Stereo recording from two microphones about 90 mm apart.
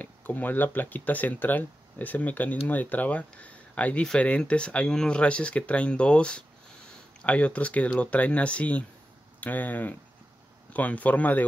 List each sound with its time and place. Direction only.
0.0 s speech: 20° left (ahead or behind)